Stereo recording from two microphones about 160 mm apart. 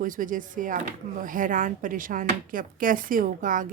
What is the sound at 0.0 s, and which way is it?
Speech, 55° right (ahead or behind).